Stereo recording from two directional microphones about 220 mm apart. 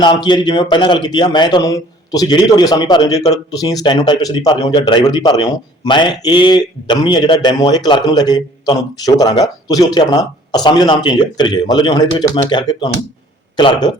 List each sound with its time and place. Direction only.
0.0 s speech: 20° left (ahead or behind)